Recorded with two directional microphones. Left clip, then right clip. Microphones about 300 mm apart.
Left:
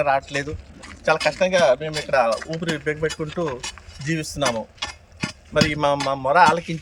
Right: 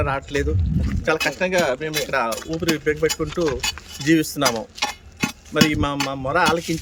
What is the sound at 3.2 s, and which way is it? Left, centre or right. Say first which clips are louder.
Speech: right 4 dB; centre.